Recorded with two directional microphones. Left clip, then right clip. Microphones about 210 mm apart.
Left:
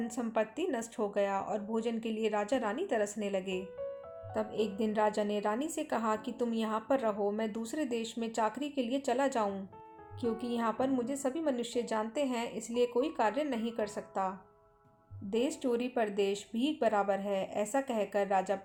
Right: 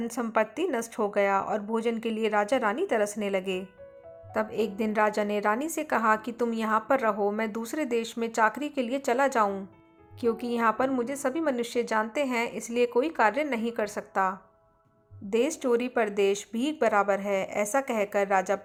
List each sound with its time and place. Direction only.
0.0 s a woman's voice: 15° right (ahead or behind)